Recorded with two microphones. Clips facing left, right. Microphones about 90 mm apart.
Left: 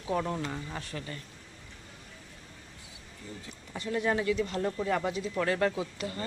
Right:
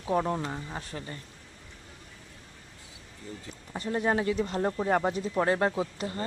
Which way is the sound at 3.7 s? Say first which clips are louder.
Right 2 dB; 35° right (ahead or behind).